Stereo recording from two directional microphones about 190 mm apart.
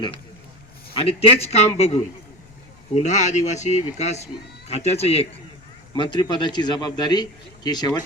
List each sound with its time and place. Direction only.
0.9 s speech: 30° left (ahead or behind)
3.0 s a man's voice: 40° left (ahead or behind); by 7.9 s 20° left (ahead or behind)